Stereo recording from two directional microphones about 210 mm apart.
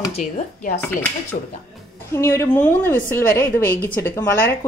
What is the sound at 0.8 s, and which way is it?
A woman's voice, 10° left (ahead or behind).